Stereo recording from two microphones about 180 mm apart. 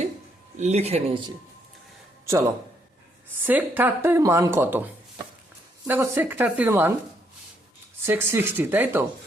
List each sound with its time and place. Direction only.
0.6 s speech: 35° right (ahead or behind)
3.4 s a woman's voice: 10° right (ahead or behind)
5.9 s a woman's voice: 15° right (ahead or behind)
8.0 s a woman's voice: 10° right (ahead or behind)